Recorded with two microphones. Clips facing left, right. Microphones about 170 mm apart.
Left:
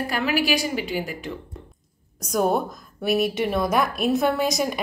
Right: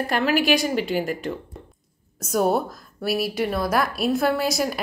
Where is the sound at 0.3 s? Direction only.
5° left (ahead or behind).